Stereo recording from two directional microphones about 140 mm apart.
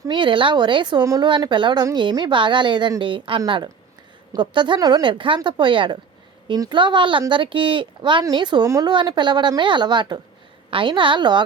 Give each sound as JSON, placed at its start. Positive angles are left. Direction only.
{"t": 0.1, "sound": "speech", "side_deg": -35}